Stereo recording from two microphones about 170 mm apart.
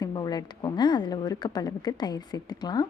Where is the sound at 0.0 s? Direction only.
25° left (ahead or behind).